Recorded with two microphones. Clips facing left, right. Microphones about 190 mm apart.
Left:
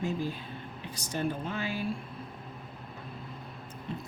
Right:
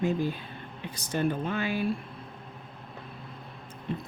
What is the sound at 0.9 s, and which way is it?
Speech, 60° right (ahead or behind).